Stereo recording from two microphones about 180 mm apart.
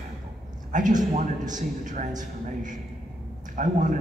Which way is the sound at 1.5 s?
45° right (ahead or behind).